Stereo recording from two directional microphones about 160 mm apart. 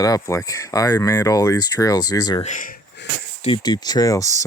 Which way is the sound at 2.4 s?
50° left (ahead or behind).